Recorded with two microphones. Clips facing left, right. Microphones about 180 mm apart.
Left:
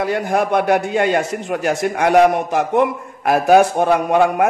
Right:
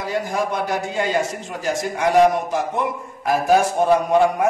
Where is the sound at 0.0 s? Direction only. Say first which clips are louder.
Left 5 dB; 60° left (ahead or behind).